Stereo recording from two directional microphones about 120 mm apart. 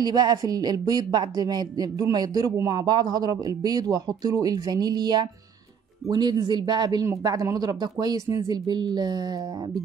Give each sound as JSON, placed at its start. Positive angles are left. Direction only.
{"t": 0.0, "sound": "a woman's voice", "side_deg": -35}